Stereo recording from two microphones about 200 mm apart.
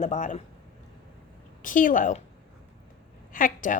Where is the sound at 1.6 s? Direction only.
40° left (ahead or behind).